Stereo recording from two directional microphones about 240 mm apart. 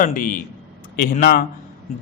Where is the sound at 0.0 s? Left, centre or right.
Left.